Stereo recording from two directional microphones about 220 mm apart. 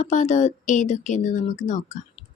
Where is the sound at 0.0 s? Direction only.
30° left (ahead or behind).